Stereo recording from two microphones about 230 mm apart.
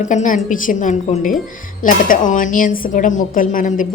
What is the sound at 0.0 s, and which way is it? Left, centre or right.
A woman's voice, left.